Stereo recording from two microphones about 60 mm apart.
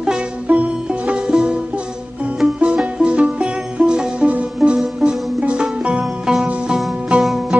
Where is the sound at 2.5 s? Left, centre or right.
Centre.